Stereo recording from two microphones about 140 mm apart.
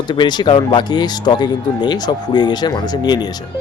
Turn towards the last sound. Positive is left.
turn(degrees=30)  # may be behind; listen again after turning